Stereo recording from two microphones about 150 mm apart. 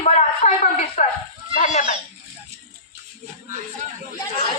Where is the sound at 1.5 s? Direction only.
55° left (ahead or behind).